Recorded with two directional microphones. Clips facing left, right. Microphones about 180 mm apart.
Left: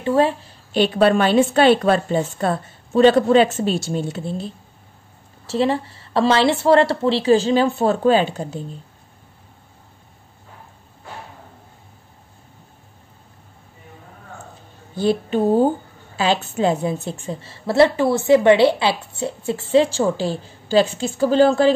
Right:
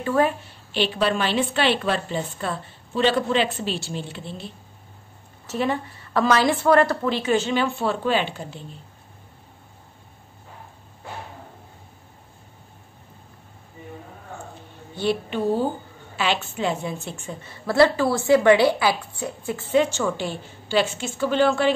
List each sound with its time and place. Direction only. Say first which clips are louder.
0.0 s a woman's voice: left 4 dB; 25° left (ahead or behind)
0.7 s a woman's voice: left 7 dB; 50° left (ahead or behind)
5.5 s a woman's voice: left 5 dB; 30° left (ahead or behind)
15.2 s a woman's voice: left 6 dB; 45° left (ahead or behind)